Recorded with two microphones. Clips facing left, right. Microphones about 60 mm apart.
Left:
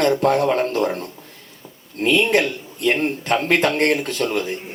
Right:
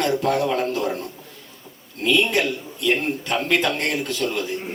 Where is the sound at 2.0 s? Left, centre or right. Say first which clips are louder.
Left 3 dB; left.